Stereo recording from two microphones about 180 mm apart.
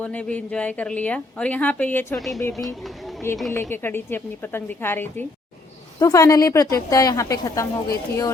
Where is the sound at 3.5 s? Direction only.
10° left (ahead or behind).